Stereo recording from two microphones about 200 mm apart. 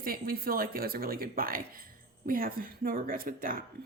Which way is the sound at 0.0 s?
45° right (ahead or behind).